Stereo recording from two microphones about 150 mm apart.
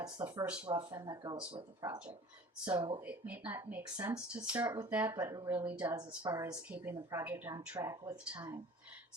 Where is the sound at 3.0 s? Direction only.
10° right (ahead or behind).